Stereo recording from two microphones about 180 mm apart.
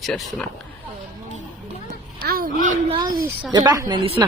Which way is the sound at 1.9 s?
55° right (ahead or behind).